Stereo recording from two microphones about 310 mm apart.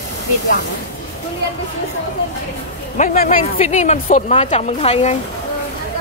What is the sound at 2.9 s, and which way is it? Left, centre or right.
Speech, left.